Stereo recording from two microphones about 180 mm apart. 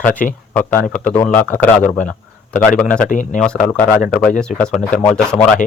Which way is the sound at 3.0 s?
45° left (ahead or behind).